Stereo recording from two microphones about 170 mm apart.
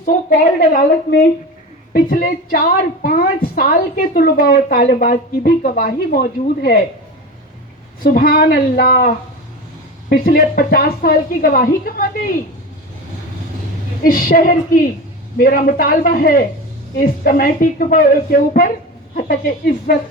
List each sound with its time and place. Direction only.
0.0 s a woman's voice: 55° left (ahead or behind)
8.0 s a woman's voice: 55° left (ahead or behind)
14.0 s a woman's voice: 55° left (ahead or behind)